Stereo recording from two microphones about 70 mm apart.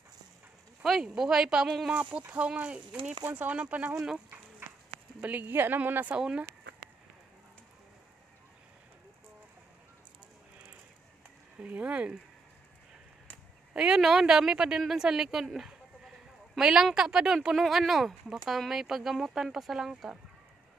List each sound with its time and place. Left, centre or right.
1.0 s speech: centre
5.2 s speech: right
6.1 s speech: centre
11.6 s speech: centre
13.7 s speech: centre